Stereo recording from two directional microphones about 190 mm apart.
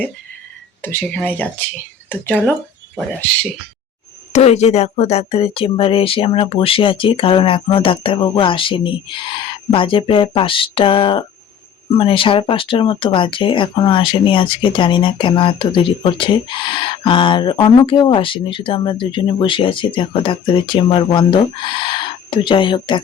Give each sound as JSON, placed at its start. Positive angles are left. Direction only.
{"t": 0.8, "sound": "speech", "side_deg": 10}
{"t": 4.3, "sound": "speech", "side_deg": 35}